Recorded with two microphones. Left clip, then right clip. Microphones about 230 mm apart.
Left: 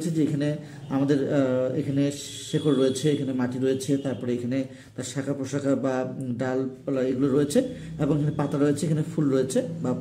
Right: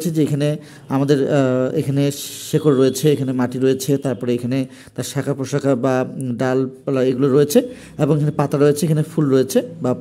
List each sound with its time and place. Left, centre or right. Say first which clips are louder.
0.2 s a man's voice: right 7 dB; right